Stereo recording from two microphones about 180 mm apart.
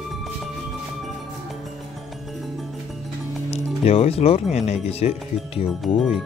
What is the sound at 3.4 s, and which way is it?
Speech, 35° left (ahead or behind).